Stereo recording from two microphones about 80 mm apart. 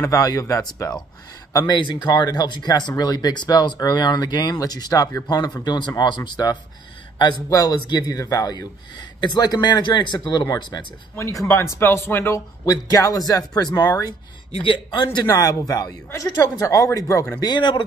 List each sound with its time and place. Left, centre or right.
0.0 s a man's voice: left
1.7 s speech: left
5.6 s speech: left
7.4 s a man's voice: left
9.2 s speech: left
11.1 s speech: left
12.6 s a man's voice: left
13.8 s a man's voice: left
14.6 s a man's voice: left
17.5 s speech: left